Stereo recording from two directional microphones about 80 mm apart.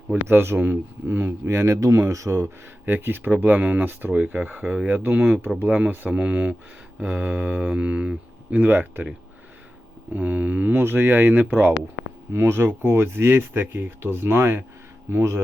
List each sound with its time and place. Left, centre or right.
0.1 s speech: right
2.8 s speech: right
4.9 s speech: right
10.1 s speech: right